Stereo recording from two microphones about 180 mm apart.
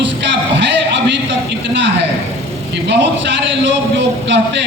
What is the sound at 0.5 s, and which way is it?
A man's voice, 80° right.